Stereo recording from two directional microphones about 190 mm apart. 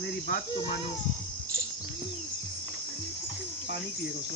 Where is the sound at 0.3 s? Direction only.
50° left (ahead or behind).